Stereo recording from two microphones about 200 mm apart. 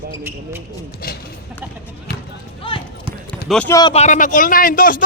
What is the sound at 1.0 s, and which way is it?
Speech, 45° left (ahead or behind).